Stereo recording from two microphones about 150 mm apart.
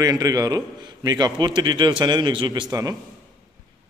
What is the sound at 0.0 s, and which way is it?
A man's voice, 25° right (ahead or behind).